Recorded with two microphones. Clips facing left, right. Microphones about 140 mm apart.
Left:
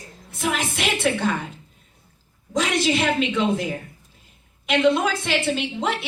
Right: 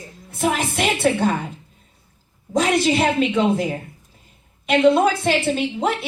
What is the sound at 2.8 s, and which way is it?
Speech, 50° right (ahead or behind).